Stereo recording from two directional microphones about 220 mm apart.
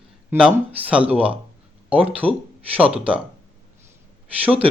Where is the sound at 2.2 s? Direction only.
10° right (ahead or behind).